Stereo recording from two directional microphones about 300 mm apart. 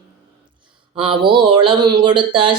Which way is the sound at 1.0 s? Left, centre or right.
Centre.